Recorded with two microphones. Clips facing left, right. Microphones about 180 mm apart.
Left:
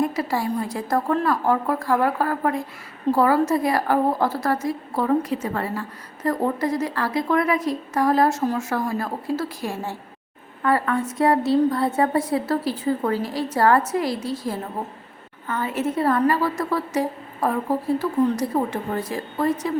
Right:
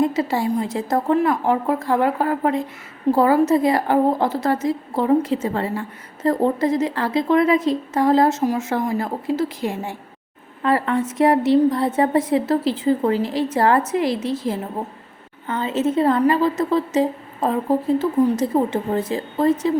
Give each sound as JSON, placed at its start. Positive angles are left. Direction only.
{"t": 0.0, "sound": "a woman's voice", "side_deg": -25}